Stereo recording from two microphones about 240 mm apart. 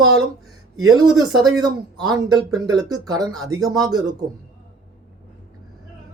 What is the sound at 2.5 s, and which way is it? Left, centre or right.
Speech, centre.